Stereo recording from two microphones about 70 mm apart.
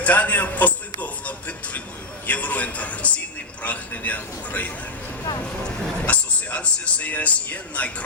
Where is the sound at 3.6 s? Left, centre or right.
Left.